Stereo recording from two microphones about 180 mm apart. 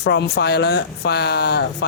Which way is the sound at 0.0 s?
70° left (ahead or behind).